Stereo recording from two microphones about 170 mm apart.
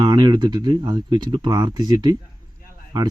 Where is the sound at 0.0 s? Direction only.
25° right (ahead or behind).